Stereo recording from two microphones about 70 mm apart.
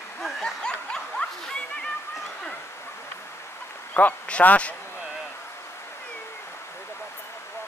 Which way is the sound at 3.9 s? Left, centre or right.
Left.